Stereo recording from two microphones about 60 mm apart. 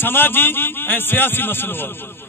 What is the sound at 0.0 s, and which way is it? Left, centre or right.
A man's voice, left.